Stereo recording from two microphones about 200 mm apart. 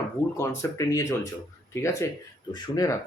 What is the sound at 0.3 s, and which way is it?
Speech, 15° left (ahead or behind).